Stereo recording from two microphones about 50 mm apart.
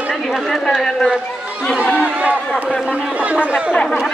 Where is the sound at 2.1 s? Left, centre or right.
Right.